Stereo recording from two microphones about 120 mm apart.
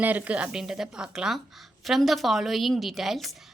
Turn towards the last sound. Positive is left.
turn(degrees=0)  # may be behind; listen again after turning